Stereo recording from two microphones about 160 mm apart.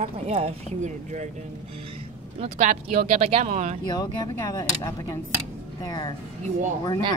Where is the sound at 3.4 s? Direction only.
45° right (ahead or behind).